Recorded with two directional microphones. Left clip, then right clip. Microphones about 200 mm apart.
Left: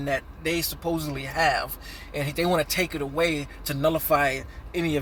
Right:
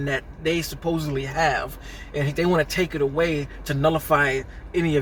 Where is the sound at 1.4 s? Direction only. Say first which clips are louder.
Even; 20° left (ahead or behind).